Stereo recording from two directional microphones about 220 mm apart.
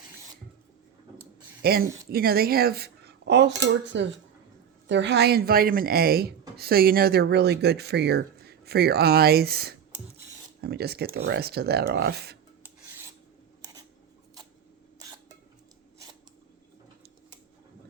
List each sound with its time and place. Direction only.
1.6 s speech: 45° right (ahead or behind)